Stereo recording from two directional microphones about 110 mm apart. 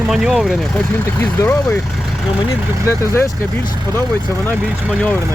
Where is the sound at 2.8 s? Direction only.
25° left (ahead or behind).